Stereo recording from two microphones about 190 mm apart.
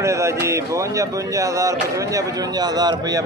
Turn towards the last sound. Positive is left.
turn(degrees=-20)  # may be behind; listen again after turning